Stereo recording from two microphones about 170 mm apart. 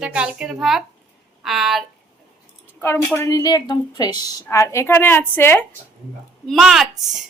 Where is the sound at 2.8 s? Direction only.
15° left (ahead or behind).